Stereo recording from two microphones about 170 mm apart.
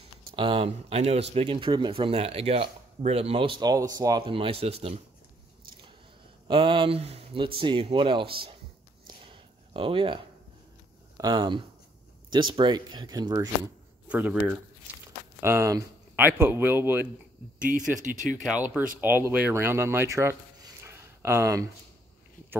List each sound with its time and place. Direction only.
0.4 s speech: 30° right (ahead or behind)
4.4 s speech: 35° right (ahead or behind)
6.4 s speech: 30° right (ahead or behind)
9.0 s a sound: 30° right (ahead or behind)
11.1 s speech: 25° right (ahead or behind)
14.0 s speech: 10° right (ahead or behind)
18.0 s speech: 50° right (ahead or behind)
18.4 s speech: 5° right (ahead or behind)